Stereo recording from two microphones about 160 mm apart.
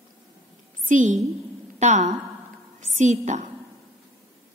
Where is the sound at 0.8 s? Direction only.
55° right (ahead or behind).